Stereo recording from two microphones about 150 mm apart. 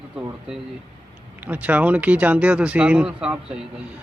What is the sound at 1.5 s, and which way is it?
Speech, 10° right (ahead or behind).